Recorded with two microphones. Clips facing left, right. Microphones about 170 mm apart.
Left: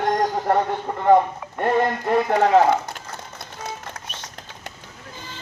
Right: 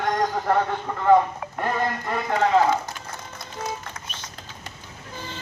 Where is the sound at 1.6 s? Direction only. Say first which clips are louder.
Left 6 dB; 35° left (ahead or behind).